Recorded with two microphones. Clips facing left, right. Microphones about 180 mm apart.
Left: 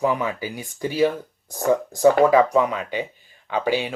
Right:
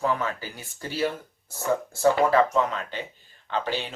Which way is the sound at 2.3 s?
10° left (ahead or behind).